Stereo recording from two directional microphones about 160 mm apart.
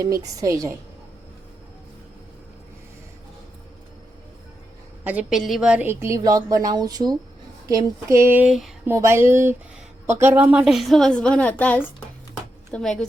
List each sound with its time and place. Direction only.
0.3 s a woman's voice: 20° right (ahead or behind)
5.0 s a woman's voice: 5° right (ahead or behind)
8.9 s a woman's voice: 15° right (ahead or behind); by 13.1 s 5° left (ahead or behind)